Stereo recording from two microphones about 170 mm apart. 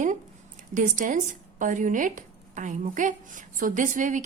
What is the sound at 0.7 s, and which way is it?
Speech, 50° right (ahead or behind).